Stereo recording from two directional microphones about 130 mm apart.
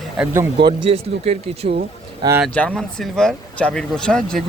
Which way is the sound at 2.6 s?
5° left (ahead or behind).